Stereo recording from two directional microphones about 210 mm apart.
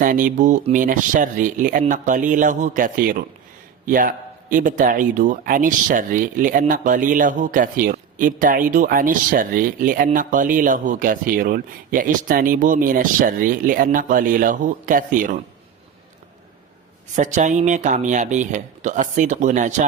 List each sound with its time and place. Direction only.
0.0 s a man's voice: 40° right (ahead or behind)
17.2 s a man's voice: 35° right (ahead or behind)